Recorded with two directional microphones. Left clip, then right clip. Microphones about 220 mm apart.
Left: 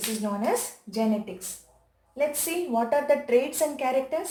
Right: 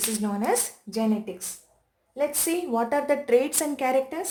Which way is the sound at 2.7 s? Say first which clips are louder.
Left 2 dB; 50° right (ahead or behind).